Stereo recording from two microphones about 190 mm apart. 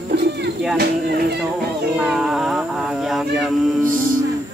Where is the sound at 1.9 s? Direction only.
5° right (ahead or behind).